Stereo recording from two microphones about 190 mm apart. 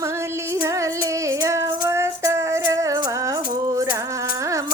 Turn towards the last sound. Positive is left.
turn(degrees=-15)  # may be behind; listen again after turning